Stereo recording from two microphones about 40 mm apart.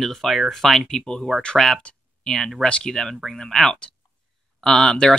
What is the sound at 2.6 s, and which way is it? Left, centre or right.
Speech, left.